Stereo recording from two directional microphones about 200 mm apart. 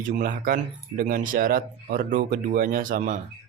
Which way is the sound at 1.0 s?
45° right (ahead or behind).